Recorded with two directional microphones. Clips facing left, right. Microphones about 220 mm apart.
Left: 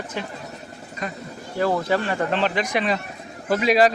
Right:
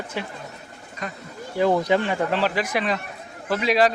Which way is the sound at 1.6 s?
20° right (ahead or behind).